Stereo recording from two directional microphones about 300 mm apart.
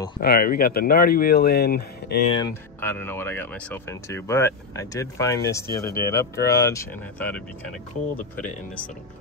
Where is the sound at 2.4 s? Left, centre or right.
Centre.